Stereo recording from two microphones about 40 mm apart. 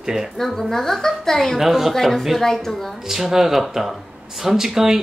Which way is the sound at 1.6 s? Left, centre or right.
Centre.